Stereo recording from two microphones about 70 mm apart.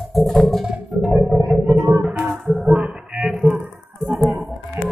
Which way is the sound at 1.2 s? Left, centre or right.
Centre.